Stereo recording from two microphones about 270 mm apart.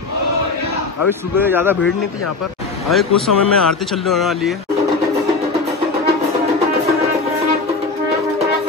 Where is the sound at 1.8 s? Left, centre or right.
Left.